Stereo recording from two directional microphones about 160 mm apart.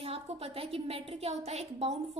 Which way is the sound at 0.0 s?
35° right (ahead or behind).